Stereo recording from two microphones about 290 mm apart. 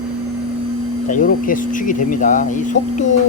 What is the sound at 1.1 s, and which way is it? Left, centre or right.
Speech, left.